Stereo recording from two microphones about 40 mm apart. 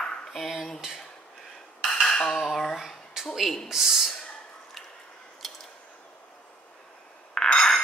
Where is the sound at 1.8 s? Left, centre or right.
Centre.